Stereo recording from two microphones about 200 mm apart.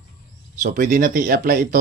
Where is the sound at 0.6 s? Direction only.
40° right (ahead or behind).